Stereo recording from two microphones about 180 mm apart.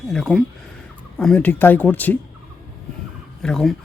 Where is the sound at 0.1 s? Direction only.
Centre (ahead or behind).